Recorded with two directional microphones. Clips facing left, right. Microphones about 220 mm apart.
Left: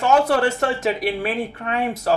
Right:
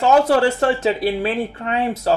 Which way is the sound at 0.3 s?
30° right (ahead or behind).